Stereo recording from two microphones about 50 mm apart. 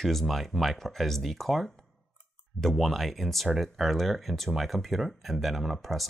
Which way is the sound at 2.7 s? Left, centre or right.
Centre.